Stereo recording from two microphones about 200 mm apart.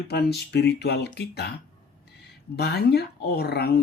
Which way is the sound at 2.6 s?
55° left (ahead or behind).